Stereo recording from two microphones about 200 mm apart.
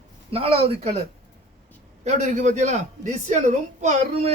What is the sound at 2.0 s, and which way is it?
A man's voice, 35° right (ahead or behind).